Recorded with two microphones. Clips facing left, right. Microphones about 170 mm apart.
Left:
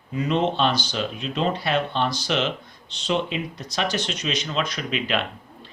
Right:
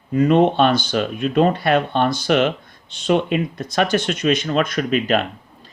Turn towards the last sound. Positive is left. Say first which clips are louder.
# right 7 dB
turn(degrees=-45)  # may be behind; listen again after turning